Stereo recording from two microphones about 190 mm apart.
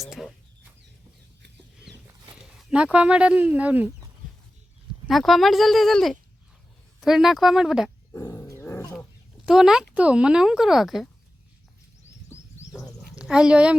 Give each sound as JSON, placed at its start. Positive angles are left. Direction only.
{"t": 0.0, "sound": "speech", "side_deg": 0}
{"t": 1.4, "sound": "chicken", "side_deg": -60}
{"t": 2.3, "sound": "speech", "side_deg": -5}
{"t": 5.0, "sound": "speech", "side_deg": 0}
{"t": 8.1, "sound": "wild animals", "side_deg": 15}
{"t": 9.5, "sound": "speech", "side_deg": -5}
{"t": 12.7, "sound": "a sound", "side_deg": 0}